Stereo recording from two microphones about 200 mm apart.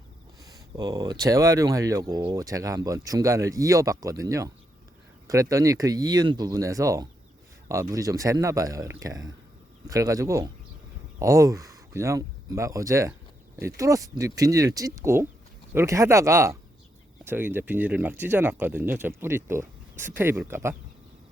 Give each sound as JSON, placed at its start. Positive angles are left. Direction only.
{"t": 0.4, "sound": "speech", "side_deg": -20}